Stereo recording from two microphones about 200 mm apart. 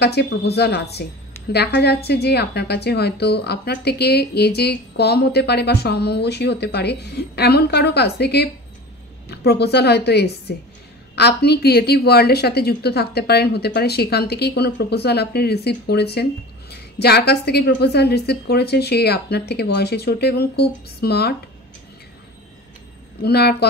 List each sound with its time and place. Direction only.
0.0 s a woman's voice: 55° left (ahead or behind)
23.2 s a woman's voice: 55° left (ahead or behind)